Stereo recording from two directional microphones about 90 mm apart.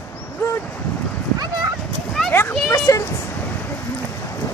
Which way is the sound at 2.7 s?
35° left (ahead or behind).